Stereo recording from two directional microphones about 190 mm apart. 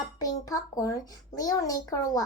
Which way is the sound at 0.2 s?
20° left (ahead or behind).